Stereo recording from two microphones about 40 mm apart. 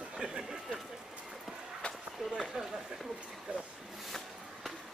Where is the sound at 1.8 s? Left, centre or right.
Left.